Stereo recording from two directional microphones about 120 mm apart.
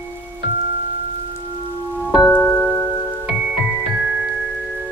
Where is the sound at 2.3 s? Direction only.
10° left (ahead or behind).